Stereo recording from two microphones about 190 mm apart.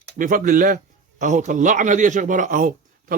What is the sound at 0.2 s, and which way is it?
A man's voice, 45° right (ahead or behind).